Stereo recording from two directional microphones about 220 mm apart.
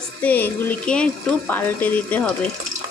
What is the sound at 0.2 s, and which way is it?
Speech, 10° left (ahead or behind).